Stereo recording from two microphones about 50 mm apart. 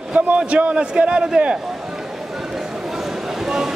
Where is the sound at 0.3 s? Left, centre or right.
Right.